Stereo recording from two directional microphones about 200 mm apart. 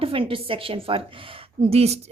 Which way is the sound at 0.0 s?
25° right (ahead or behind).